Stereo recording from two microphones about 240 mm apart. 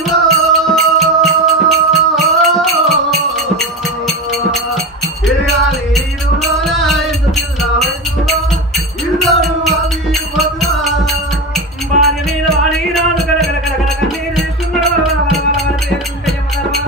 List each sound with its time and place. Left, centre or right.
0.0 s music: centre